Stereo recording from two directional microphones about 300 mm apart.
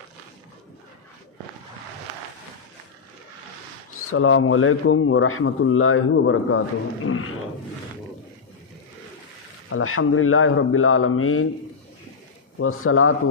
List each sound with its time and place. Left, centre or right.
4.1 s speech: left
9.6 s speech: left
12.5 s speech: left